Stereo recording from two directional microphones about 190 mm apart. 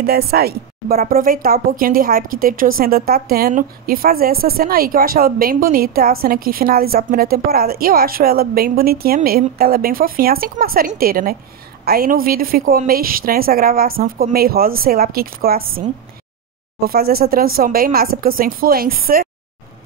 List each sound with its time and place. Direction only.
0.0 s a woman's voice: 55° right (ahead or behind)
16.8 s a woman's voice: 55° right (ahead or behind)